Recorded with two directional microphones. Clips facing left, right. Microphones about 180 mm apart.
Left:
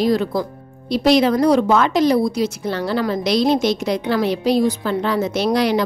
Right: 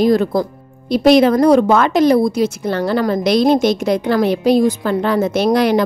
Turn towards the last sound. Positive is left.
turn(degrees=-50)  # may be behind; listen again after turning